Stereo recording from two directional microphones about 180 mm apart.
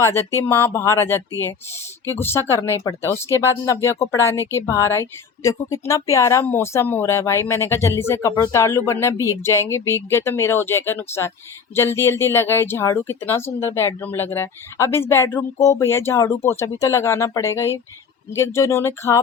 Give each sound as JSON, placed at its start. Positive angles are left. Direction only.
{"t": 0.0, "sound": "speech", "side_deg": 15}